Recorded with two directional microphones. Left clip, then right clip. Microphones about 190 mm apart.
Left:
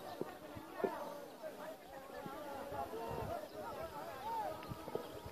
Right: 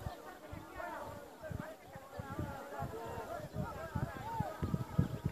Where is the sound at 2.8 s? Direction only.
35° right (ahead or behind).